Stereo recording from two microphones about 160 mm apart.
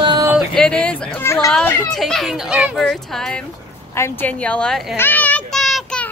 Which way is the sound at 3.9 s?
15° left (ahead or behind).